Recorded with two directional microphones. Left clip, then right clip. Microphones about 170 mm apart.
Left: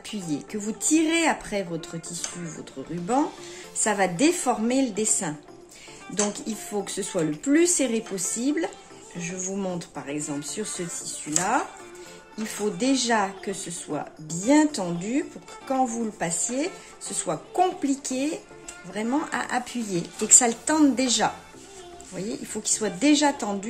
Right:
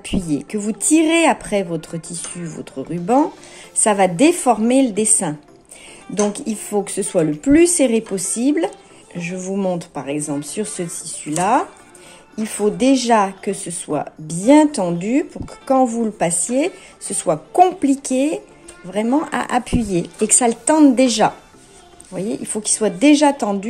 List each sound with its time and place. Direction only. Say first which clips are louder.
0.0 s speech: right 9 dB; 40° right (ahead or behind)
6.3 s speech: right 9 dB; 40° right (ahead or behind)